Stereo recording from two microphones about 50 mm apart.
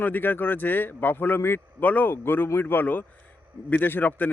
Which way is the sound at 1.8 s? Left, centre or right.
Left.